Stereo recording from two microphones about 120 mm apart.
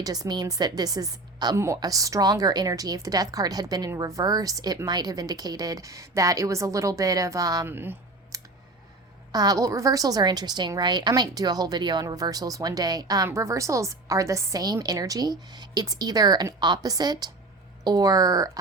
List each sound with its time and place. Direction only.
0.0 s a woman's voice: 30° right (ahead or behind)
7.7 s speech: 20° right (ahead or behind)
8.3 s clicking: 30° right (ahead or behind)
9.3 s a woman's voice: 30° right (ahead or behind)